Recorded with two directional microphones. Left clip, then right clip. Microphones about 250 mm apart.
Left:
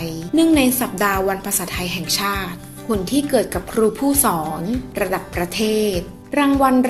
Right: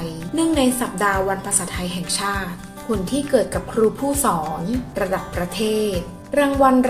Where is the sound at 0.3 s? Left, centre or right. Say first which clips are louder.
Left 3 dB; left.